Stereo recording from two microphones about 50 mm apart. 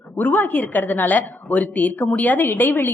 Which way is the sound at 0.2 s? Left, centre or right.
Left.